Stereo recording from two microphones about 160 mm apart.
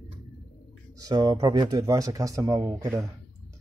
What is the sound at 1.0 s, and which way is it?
A man's voice, 25° right (ahead or behind).